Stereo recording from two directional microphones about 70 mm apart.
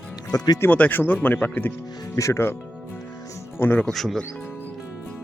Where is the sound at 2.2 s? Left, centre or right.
Left.